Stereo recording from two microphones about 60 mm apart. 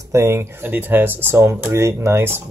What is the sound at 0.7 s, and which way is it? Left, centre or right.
Speech, right.